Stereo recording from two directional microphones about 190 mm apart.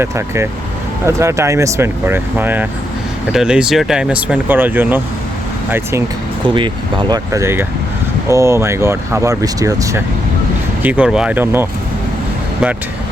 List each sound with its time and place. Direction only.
1.0 s speech: 15° right (ahead or behind)
6.5 s speech: 25° right (ahead or behind)
10.8 s speech: 5° right (ahead or behind)